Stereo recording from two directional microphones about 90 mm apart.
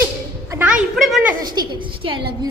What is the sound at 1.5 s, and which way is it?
Speech, 60° right (ahead or behind).